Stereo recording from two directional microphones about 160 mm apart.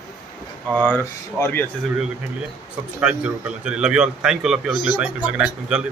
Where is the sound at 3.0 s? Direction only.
5° right (ahead or behind).